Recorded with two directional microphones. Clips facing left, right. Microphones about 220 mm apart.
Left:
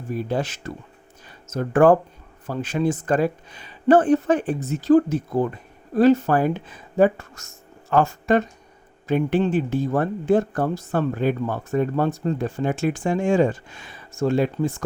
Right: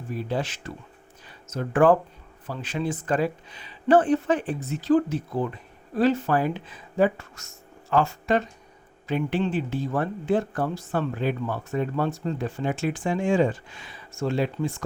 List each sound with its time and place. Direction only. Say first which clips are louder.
0.2 s speech: left 3 dB; 45° left (ahead or behind)